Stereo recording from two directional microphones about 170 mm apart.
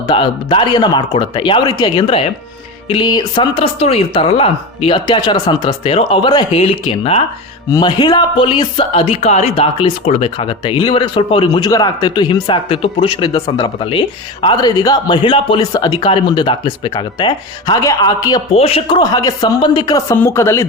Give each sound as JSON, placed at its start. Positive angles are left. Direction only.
{"t": 0.1, "sound": "speech", "side_deg": 25}
{"t": 7.7, "sound": "speech", "side_deg": 25}
{"t": 18.5, "sound": "speech", "side_deg": 35}